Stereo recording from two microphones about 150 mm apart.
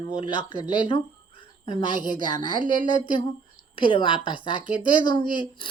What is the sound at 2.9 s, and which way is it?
Speech, 30° left (ahead or behind).